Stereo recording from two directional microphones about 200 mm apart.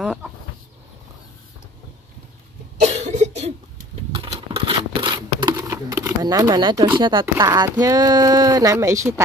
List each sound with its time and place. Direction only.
0.0 s chicken: centre (ahead or behind)
2.8 s cough: 35° right (ahead or behind)
4.1 s a sound: 25° right (ahead or behind)
7.0 s speech: 25° right (ahead or behind)